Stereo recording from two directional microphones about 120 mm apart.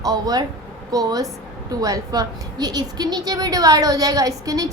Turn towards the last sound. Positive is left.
turn(degrees=-30)  # may be behind; listen again after turning